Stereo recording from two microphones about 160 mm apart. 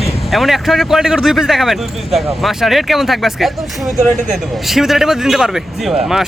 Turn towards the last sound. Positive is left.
turn(degrees=0)  # may be behind; listen again after turning